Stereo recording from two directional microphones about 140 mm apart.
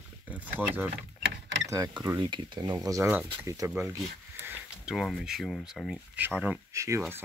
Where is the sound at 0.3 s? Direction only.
10° right (ahead or behind).